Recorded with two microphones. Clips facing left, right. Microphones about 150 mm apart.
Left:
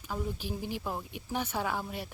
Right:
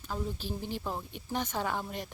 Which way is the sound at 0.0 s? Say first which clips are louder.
Even; 10° left (ahead or behind).